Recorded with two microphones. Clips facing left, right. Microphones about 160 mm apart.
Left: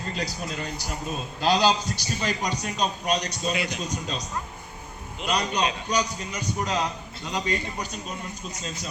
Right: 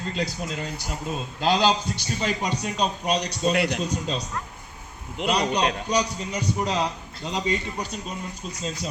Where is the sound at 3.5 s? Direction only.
70° right (ahead or behind).